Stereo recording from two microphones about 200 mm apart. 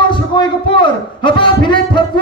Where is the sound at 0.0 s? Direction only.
25° left (ahead or behind).